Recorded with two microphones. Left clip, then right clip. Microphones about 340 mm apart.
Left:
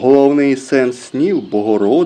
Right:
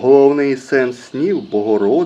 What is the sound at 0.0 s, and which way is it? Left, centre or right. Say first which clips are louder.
Speech: even; centre.